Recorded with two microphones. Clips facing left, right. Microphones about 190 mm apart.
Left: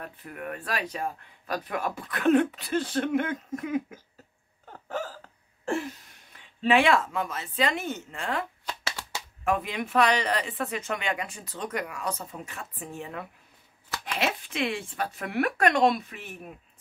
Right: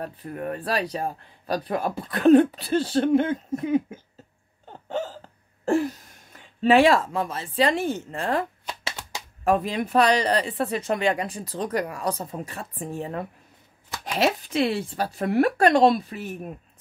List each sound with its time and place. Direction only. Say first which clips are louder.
0.0 s speech: right 7 dB; 35° right (ahead or behind)
4.6 s hiccup: right 4 dB; 25° right (ahead or behind)
5.7 s speech: right 8 dB; 40° right (ahead or behind)
8.8 s computer keyboard: right 1 dB; 20° right (ahead or behind)
9.4 s speech: right 5 dB; 35° right (ahead or behind)